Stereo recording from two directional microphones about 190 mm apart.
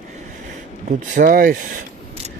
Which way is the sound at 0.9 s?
45° right (ahead or behind).